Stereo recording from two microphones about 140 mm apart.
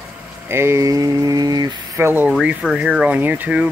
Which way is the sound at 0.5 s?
20° right (ahead or behind).